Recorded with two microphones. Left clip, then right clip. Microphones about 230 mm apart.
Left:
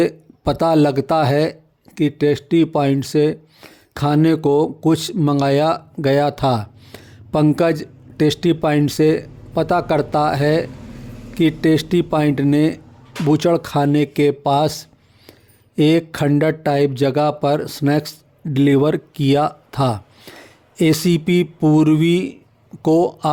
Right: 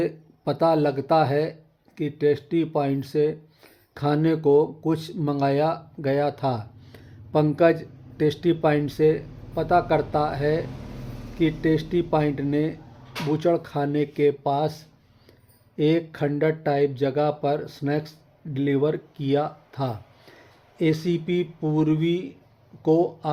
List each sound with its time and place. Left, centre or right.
0.0 s speech: left